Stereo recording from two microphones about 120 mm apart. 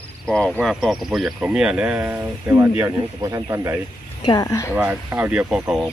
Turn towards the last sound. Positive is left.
turn(degrees=-10)  # may be behind; listen again after turning